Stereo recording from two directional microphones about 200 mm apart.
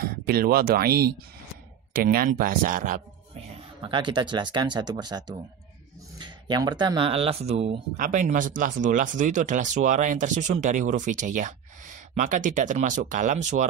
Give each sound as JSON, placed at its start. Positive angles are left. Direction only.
{"t": 0.0, "sound": "speech", "side_deg": -50}